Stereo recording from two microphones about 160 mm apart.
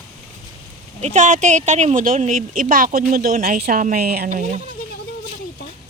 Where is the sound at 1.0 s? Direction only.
50° right (ahead or behind); by 4.2 s 70° right (ahead or behind).